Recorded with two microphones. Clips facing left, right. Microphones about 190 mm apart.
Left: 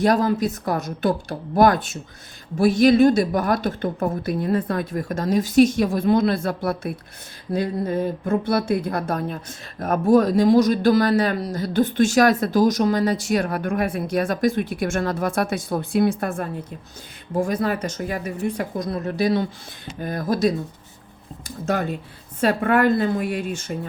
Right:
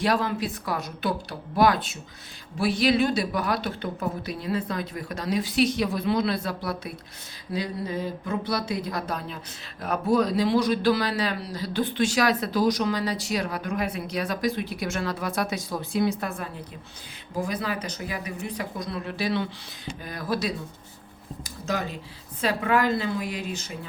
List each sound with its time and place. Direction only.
0.0 s speech: 40° left (ahead or behind)